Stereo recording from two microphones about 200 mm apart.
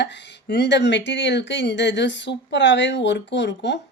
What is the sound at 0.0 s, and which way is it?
Speech, 60° left (ahead or behind).